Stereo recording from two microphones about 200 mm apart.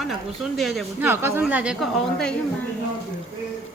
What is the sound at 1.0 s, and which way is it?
A woman's voice, 10° right (ahead or behind).